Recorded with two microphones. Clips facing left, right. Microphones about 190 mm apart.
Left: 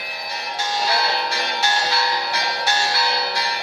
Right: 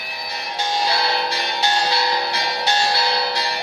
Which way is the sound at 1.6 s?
20° right (ahead or behind).